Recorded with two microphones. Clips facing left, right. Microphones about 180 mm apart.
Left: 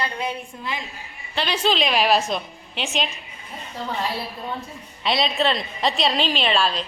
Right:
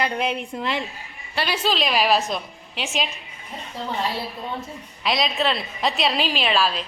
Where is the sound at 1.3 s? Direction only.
5° right (ahead or behind).